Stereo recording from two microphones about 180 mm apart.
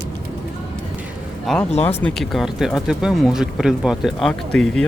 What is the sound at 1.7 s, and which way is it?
Speech, 35° left (ahead or behind).